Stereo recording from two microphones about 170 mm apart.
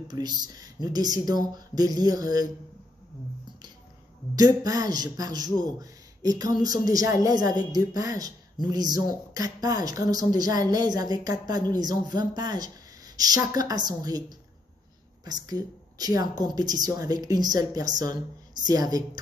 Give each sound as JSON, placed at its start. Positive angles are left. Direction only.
{"t": 0.1, "sound": "a man's voice", "side_deg": -25}
{"t": 4.4, "sound": "a man's voice", "side_deg": -20}
{"t": 15.4, "sound": "a man's voice", "side_deg": -20}